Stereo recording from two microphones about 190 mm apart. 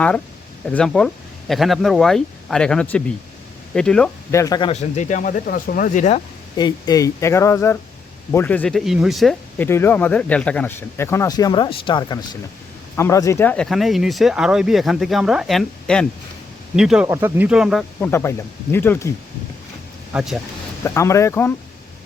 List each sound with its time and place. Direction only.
0.7 s speech: 5° left (ahead or behind)
4.3 s speech: 15° left (ahead or behind)
4.7 s speech: 35° left (ahead or behind)
6.6 s speech: 20° left (ahead or behind); by 9.6 s centre (ahead or behind)
9.6 s speech: 10° left (ahead or behind)
18.0 s speech: 15° left (ahead or behind)
20.1 s speech: centre (ahead or behind)
20.8 s speech: 15° left (ahead or behind)